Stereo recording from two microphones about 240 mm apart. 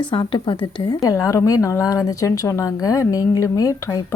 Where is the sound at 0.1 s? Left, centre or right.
Left.